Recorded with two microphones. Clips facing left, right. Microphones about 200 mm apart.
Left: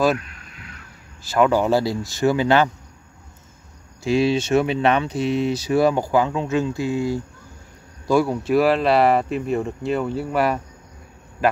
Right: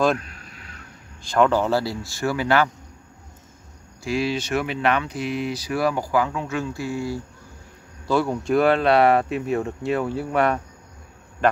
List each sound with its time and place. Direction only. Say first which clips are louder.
0.2 s a sound: even; 35° right (ahead or behind)
1.2 s a man's voice: left 1 dB; 5° left (ahead or behind); by 2.7 s 25° left (ahead or behind)
4.0 s speech: left 5 dB; 25° left (ahead or behind)
8.1 s speech: left 3 dB; 10° left (ahead or behind)